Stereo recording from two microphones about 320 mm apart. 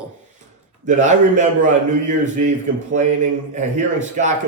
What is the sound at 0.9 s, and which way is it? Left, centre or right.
A man's voice, right.